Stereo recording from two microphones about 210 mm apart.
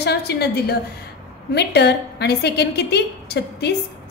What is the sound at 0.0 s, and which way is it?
Speech, 50° left (ahead or behind).